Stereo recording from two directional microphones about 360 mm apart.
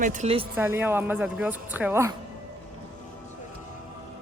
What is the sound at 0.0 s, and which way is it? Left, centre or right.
Speech, centre.